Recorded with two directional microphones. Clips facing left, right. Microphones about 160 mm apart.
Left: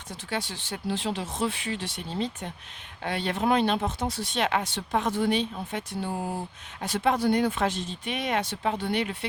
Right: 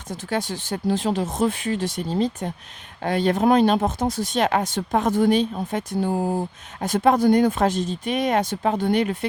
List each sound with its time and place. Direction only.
0.1 s speech: 45° right (ahead or behind)